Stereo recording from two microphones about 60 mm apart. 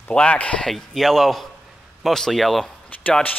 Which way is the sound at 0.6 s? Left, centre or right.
Centre.